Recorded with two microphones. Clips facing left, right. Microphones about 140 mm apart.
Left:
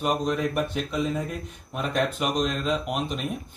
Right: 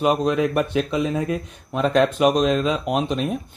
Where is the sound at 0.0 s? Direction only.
85° right.